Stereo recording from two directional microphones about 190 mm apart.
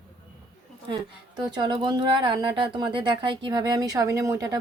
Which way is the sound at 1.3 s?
20° right (ahead or behind).